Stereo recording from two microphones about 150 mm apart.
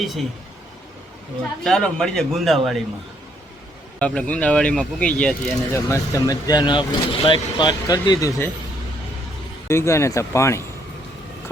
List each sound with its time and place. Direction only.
0.0 s speech: centre (ahead or behind)
1.6 s speech: 5° left (ahead or behind)
4.0 s speech: 10° left (ahead or behind)
5.7 s speech: 20° left (ahead or behind)
9.6 s speech: 20° left (ahead or behind)